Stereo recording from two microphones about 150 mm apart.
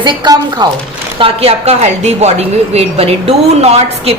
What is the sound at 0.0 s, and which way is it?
Speech, 30° right (ahead or behind).